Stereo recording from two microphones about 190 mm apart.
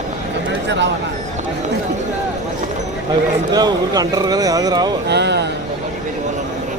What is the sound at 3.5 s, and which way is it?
Speech, 20° right (ahead or behind).